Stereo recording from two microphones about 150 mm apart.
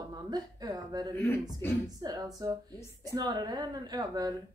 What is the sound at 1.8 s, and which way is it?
Speech, 25° right (ahead or behind).